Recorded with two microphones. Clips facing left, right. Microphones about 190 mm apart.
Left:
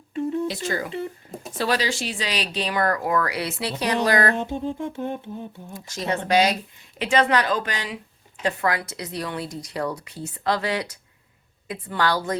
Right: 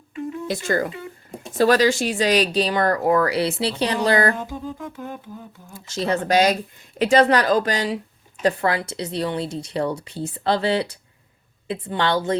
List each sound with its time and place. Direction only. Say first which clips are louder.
0.4 s a woman's voice: right 4 dB; 50° right (ahead or behind); by 4.4 s 30° right (ahead or behind)
4.4 s a sound: left 4 dB; 25° left (ahead or behind)
5.7 s a woman's voice: right 4 dB; 30° right (ahead or behind)
6.2 s a woman's voice: right 1 dB; 45° right (ahead or behind); by 12.4 s 25° right (ahead or behind)